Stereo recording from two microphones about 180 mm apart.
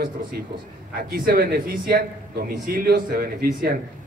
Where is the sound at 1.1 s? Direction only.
55° right (ahead or behind).